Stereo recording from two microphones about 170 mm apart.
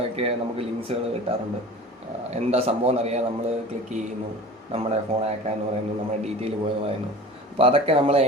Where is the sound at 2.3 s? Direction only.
35° right (ahead or behind).